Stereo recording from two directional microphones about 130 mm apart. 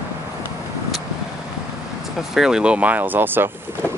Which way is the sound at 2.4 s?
5° right (ahead or behind).